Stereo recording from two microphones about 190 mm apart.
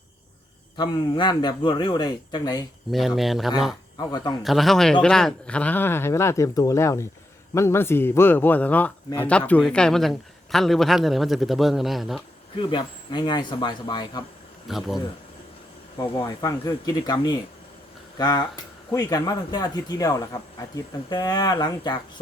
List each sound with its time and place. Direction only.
0.8 s speech: 25° left (ahead or behind)
3.2 s a man's voice: centre (ahead or behind)
3.9 s speech: 20° left (ahead or behind)
4.4 s a man's voice: centre (ahead or behind)
12.5 s speech: 25° left (ahead or behind)
14.7 s a man's voice: centre (ahead or behind)
16.0 s speech: 20° left (ahead or behind)